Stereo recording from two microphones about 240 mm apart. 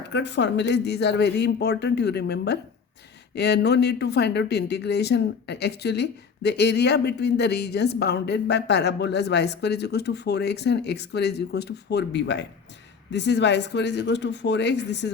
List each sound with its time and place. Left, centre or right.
0.1 s speech: left